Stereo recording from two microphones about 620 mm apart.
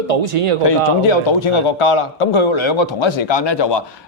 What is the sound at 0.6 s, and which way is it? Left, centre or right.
A man's voice, left.